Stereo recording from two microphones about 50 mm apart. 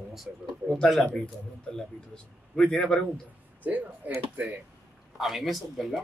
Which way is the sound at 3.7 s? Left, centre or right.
Right.